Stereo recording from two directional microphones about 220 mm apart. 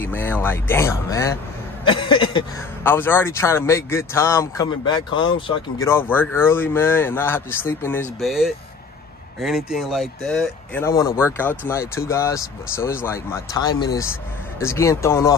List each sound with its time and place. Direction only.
0.0 s speech: 10° left (ahead or behind)
1.9 s a sound: 20° left (ahead or behind)
2.8 s speech: 10° left (ahead or behind)